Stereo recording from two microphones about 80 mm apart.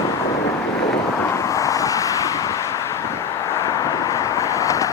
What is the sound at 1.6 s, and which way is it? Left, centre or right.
Vehicle, left.